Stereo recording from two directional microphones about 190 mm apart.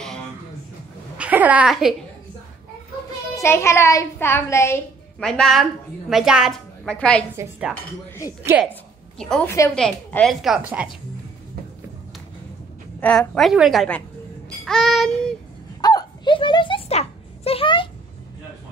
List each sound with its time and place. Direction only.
1.1 s a sound: 5° right (ahead or behind)
3.3 s a child's voice: 15° left (ahead or behind)
5.2 s a woman's voice: 5° left (ahead or behind)
8.5 s a woman's voice: 10° right (ahead or behind)
9.2 s a child's voice: 5° left (ahead or behind)
13.0 s a woman's voice: 5° left (ahead or behind)
15.8 s a sound: 20° left (ahead or behind)